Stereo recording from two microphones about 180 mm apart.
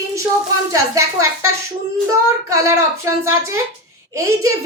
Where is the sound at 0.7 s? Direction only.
15° right (ahead or behind).